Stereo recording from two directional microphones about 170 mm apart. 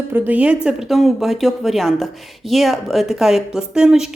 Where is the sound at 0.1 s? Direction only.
10° right (ahead or behind).